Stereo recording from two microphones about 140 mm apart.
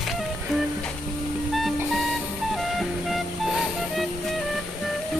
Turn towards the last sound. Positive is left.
turn(degrees=0)  # may be behind; listen again after turning